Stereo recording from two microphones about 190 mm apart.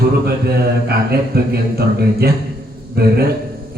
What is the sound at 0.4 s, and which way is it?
Speech, 55° right (ahead or behind).